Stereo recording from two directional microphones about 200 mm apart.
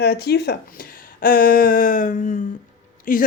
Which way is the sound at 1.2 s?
45° left (ahead or behind).